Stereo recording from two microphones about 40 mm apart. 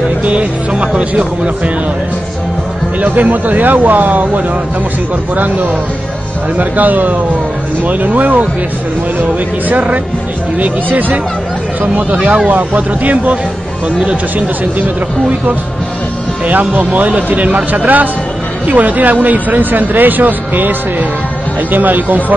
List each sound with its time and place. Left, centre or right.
0.2 s speech: right
3.0 s speech: right
5.3 s speech: right
14.8 s speech: right
21.7 s speech: right